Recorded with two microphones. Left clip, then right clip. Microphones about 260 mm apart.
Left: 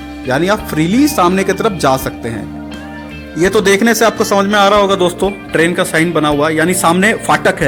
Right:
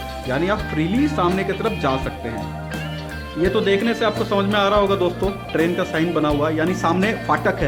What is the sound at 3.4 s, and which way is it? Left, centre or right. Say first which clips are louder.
Speech: left 8 dB; left.